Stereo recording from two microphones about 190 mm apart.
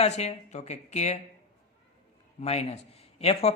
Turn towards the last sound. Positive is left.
turn(degrees=30)  # may be behind; listen again after turning